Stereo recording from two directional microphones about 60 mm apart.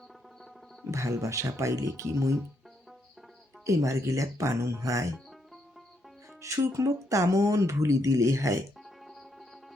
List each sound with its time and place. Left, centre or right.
0.9 s speech: right
3.7 s speech: right
6.4 s speech: right